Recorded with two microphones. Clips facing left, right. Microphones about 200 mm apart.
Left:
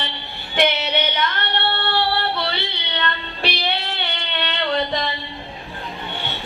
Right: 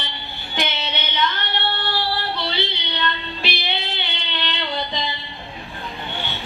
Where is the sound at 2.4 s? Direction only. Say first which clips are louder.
Even; 60° left (ahead or behind).